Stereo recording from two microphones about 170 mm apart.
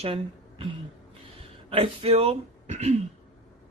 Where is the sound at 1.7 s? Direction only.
35° right (ahead or behind).